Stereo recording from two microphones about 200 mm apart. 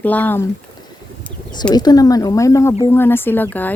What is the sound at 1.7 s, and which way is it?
Speech, 20° left (ahead or behind).